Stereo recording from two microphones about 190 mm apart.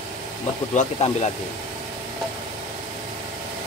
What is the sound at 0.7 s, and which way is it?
Speech, 35° left (ahead or behind).